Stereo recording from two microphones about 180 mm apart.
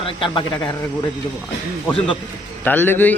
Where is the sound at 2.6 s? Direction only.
10° left (ahead or behind).